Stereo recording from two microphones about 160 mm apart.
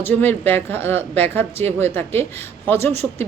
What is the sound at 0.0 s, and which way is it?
A woman's voice, 15° left (ahead or behind).